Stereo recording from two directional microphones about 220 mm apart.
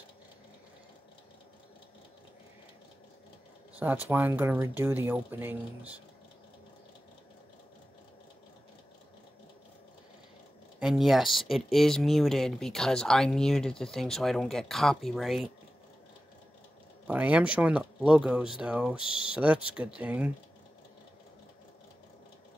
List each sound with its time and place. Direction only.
3.8 s speech: 10° right (ahead or behind)
10.8 s speech: centre (ahead or behind)
17.1 s speech: 5° right (ahead or behind)
19.0 s speech: 20° left (ahead or behind)
19.3 s speech: 5° right (ahead or behind)